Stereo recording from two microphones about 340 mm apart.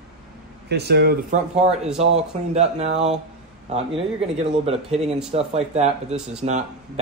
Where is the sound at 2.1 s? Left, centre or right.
Centre.